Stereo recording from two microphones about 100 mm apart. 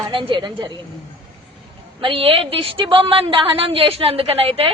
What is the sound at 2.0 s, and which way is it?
Speech, 65° right (ahead or behind).